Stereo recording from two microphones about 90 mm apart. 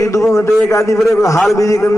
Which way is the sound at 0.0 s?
35° left (ahead or behind).